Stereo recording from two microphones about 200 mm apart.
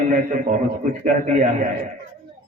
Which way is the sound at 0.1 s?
40° right (ahead or behind).